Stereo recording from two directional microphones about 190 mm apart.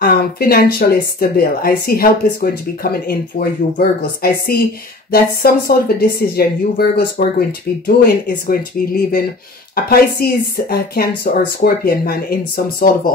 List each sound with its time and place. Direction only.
0.0 s speech: 55° left (ahead or behind)